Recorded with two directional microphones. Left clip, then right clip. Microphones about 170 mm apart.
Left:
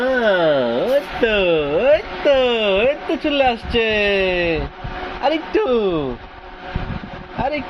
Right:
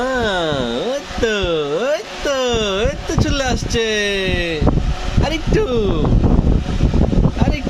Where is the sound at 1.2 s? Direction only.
45° right (ahead or behind).